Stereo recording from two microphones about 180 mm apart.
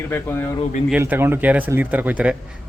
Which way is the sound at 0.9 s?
10° right (ahead or behind).